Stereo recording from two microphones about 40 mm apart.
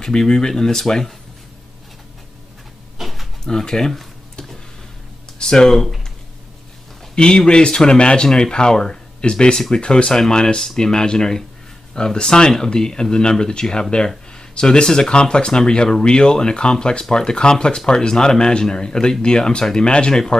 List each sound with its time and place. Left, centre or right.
0.0 s speech: centre
3.0 s a sound: centre
3.4 s speech: centre
5.4 s speech: centre
7.2 s speech: left